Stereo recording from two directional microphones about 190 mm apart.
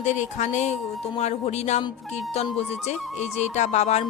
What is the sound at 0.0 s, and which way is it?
A woman's voice, 40° left (ahead or behind).